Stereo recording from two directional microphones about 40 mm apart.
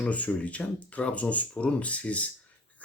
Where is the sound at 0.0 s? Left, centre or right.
Left.